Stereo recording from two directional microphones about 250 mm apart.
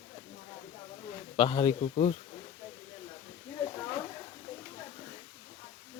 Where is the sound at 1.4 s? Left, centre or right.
Left.